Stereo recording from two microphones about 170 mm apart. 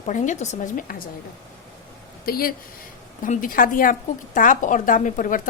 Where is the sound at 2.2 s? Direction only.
60° left (ahead or behind).